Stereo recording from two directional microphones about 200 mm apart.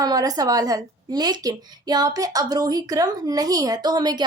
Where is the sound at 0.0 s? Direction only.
20° right (ahead or behind).